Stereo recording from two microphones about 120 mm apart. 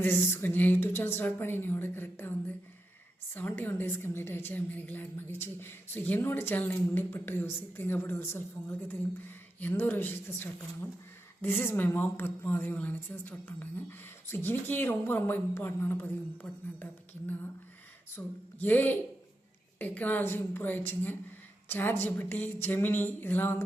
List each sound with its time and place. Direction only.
0.0 s a woman's voice: 20° left (ahead or behind)
3.3 s a woman's voice: 15° left (ahead or behind)
9.6 s a woman's voice: 15° left (ahead or behind)